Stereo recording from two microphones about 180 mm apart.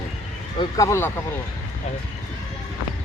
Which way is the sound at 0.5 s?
20° left (ahead or behind).